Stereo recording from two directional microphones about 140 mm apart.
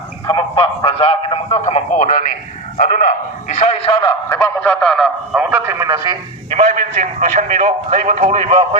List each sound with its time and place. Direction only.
0.3 s a man's voice: 35° left (ahead or behind); by 3.6 s 75° left (ahead or behind)
4.0 s a man's voice: 25° left (ahead or behind)
4.4 s a man's voice: 10° left (ahead or behind)
5.4 s a man's voice: 10° right (ahead or behind)
6.7 s a man's voice: 70° right (ahead or behind)
8.4 s speech: 40° right (ahead or behind)